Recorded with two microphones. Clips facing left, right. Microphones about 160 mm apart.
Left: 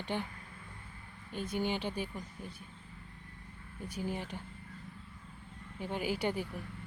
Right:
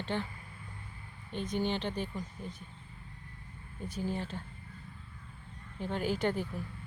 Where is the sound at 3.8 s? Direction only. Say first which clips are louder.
Right 2 dB; 10° left (ahead or behind).